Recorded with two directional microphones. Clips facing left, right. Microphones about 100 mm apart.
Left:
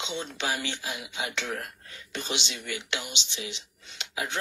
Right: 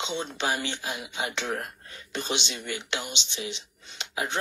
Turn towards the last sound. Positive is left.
turn(degrees=-35)  # may be behind; listen again after turning